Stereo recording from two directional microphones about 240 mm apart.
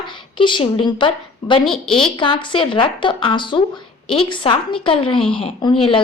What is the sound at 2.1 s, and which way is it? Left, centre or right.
A woman's voice, centre.